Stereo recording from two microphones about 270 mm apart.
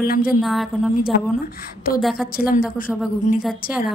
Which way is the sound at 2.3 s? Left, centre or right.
Left.